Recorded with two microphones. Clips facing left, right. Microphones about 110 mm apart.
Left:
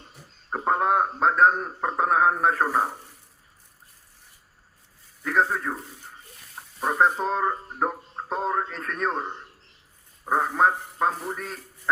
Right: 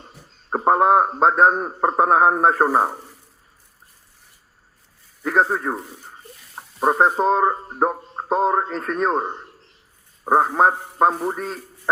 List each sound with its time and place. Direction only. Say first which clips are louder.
0.5 s a sound: right 7 dB; 35° right (ahead or behind)
0.9 s a man's voice: right 5 dB; 40° right (ahead or behind)
2.6 s speech: right 6 dB; 40° right (ahead or behind)
5.2 s speech: right 4 dB; 30° right (ahead or behind)
8.3 s a man's voice: right 8 dB; 25° right (ahead or behind)
10.4 s speech: right 1 dB; 35° right (ahead or behind)
10.7 s a man's voice: right 4 dB; 45° right (ahead or behind)
11.3 s a man's voice: right 7 dB; 25° right (ahead or behind)